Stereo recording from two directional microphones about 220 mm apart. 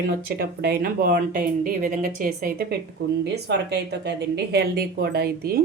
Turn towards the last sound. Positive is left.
turn(degrees=-45)  # may be behind; listen again after turning